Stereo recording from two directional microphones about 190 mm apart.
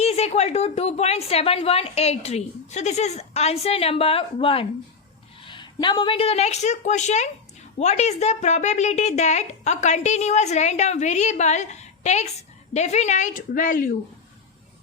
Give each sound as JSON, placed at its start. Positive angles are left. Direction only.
{"t": 0.0, "sound": "a woman's voice", "side_deg": 35}